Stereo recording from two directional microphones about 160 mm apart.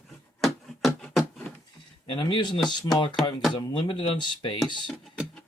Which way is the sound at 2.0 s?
30° left (ahead or behind).